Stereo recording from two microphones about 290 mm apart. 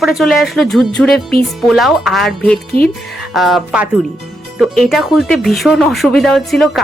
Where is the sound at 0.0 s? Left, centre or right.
Centre.